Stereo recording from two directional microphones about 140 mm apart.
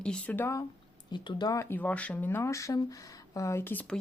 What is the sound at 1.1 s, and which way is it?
Speech, 30° left (ahead or behind).